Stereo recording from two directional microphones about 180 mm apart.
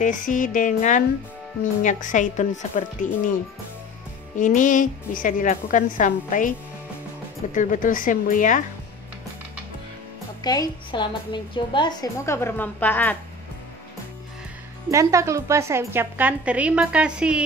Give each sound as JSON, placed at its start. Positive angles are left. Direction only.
{"t": 0.0, "sound": "a woman's voice", "side_deg": 45}
{"t": 4.4, "sound": "a woman's voice", "side_deg": 45}
{"t": 7.5, "sound": "a woman's voice", "side_deg": 50}
{"t": 10.4, "sound": "a woman's voice", "side_deg": 20}
{"t": 14.9, "sound": "a woman's voice", "side_deg": -15}